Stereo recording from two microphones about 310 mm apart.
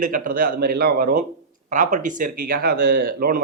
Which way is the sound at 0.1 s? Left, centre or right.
Right.